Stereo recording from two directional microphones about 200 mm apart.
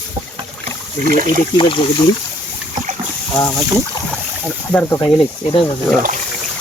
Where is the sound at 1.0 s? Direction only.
45° right (ahead or behind).